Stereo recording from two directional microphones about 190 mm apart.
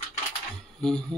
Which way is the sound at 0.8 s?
5° left (ahead or behind).